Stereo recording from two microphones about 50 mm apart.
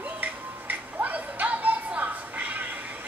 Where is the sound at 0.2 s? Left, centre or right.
Right.